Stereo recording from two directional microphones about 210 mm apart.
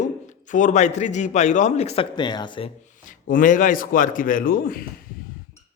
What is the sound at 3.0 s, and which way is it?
A man's voice, 40° left (ahead or behind).